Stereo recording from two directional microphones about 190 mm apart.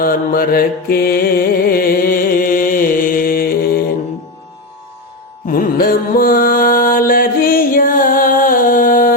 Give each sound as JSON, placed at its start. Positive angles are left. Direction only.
{"t": 0.0, "sound": "mantra", "side_deg": 50}
{"t": 5.5, "sound": "mantra", "side_deg": 50}